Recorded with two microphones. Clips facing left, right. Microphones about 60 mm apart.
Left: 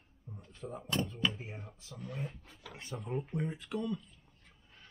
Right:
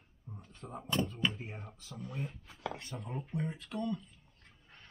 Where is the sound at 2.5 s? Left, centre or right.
Right.